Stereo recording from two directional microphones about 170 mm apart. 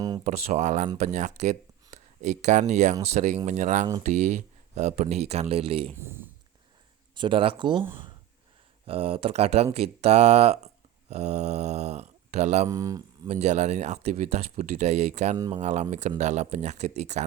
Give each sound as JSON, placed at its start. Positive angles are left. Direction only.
{"t": 0.3, "sound": "speech", "side_deg": -40}
{"t": 6.0, "sound": "speech", "side_deg": -15}
{"t": 7.2, "sound": "speech", "side_deg": -30}
{"t": 8.9, "sound": "speech", "side_deg": -35}
{"t": 12.6, "sound": "speech", "side_deg": -20}
{"t": 13.2, "sound": "speech", "side_deg": -40}
{"t": 15.4, "sound": "speech", "side_deg": -25}
{"t": 15.6, "sound": "speech", "side_deg": -45}